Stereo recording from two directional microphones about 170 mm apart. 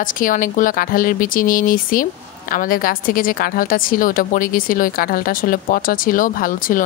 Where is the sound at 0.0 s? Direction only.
50° left (ahead or behind).